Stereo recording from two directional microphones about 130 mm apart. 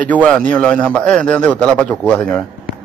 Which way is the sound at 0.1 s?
10° left (ahead or behind).